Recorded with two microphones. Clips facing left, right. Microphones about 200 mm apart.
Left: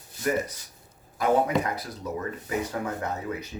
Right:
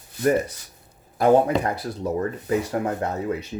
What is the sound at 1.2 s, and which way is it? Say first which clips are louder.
Speech: right 6 dB; 30° right (ahead or behind).